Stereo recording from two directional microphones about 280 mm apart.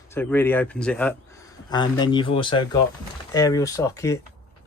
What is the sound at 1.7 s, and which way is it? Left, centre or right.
Speech, centre.